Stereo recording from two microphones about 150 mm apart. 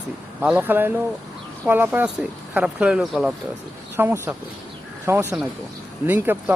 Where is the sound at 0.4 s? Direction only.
10° right (ahead or behind).